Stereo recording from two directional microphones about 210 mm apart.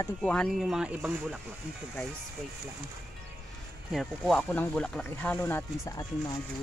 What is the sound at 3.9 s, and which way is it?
Speech, centre (ahead or behind).